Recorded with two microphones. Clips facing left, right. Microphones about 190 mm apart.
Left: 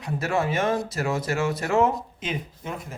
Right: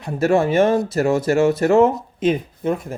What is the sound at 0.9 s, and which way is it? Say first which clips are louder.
Speech: right 9 dB; 45° right (ahead or behind).